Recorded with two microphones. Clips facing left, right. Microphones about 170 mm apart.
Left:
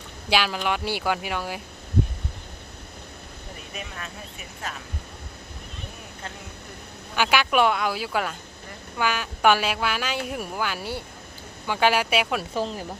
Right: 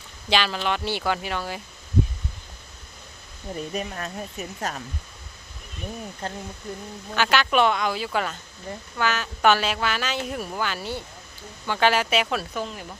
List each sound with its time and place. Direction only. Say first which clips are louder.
0.3 s a woman's voice: even; 10° left (ahead or behind)
3.7 s speech: right 7 dB; 40° right (ahead or behind)
6.2 s speech: right 6 dB; 35° right (ahead or behind)
7.2 s a woman's voice: even; 10° left (ahead or behind)
12.5 s speech: left 3 dB; 35° left (ahead or behind)